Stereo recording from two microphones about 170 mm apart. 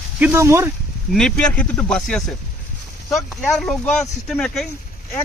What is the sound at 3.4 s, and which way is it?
Speech, 5° left (ahead or behind).